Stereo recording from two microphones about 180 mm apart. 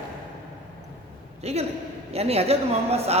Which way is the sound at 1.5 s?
35° right (ahead or behind).